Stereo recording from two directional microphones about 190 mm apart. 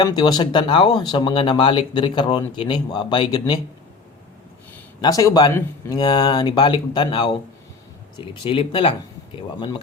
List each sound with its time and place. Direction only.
0.0 s speech: 20° left (ahead or behind)
4.9 s speech: 20° left (ahead or behind)